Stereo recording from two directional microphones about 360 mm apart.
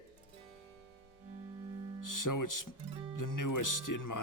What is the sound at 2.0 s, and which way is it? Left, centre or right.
Music, left.